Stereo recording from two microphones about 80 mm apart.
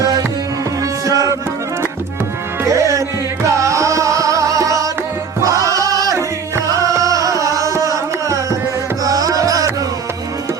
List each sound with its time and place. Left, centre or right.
1.0 s music: right
2.6 s music: right